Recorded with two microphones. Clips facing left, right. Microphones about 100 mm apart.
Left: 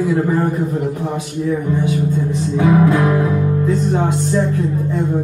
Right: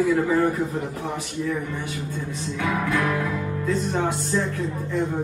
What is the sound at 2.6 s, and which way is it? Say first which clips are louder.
Speech: left 11 dB; 25° left (ahead or behind).